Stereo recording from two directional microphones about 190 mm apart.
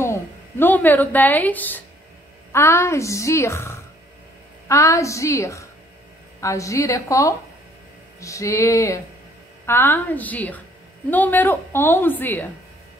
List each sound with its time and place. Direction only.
0.0 s a woman's voice: 10° left (ahead or behind)